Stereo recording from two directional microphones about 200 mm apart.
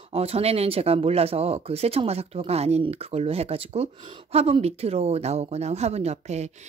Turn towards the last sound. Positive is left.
turn(degrees=-35)  # may be behind; listen again after turning